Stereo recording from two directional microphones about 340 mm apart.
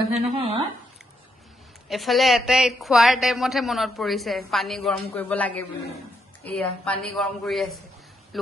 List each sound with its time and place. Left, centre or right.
0.3 s speech: centre
1.9 s a woman's voice: centre